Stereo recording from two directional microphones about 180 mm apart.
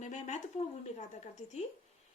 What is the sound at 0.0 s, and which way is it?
Speech, 40° left (ahead or behind).